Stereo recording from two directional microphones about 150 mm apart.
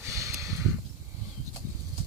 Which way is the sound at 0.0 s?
20° right (ahead or behind).